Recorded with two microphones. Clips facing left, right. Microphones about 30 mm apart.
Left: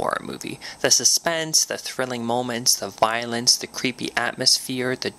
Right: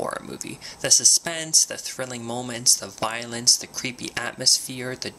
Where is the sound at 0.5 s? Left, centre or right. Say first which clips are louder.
Left 2 dB; centre.